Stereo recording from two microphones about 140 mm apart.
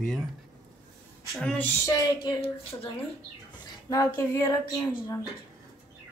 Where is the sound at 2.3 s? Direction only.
40° left (ahead or behind).